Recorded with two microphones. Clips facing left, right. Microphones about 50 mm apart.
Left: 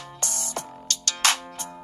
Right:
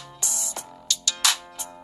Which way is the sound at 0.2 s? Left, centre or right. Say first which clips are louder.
Left 3 dB; left.